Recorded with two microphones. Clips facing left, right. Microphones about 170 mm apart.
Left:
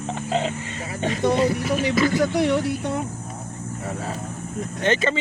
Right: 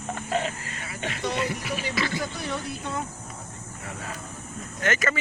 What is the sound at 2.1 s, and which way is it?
Speech, 80° left.